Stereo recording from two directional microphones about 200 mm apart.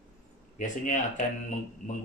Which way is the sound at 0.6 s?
40° left (ahead or behind).